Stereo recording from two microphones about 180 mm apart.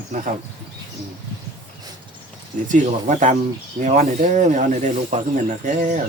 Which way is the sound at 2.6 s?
45° right (ahead or behind).